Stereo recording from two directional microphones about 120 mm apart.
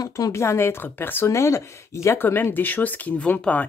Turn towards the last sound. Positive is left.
turn(degrees=10)  # may be behind; listen again after turning